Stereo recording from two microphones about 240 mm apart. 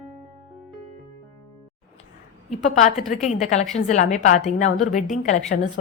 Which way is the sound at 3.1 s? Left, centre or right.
Left.